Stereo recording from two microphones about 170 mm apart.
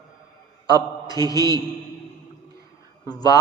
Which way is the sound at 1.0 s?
20° left (ahead or behind).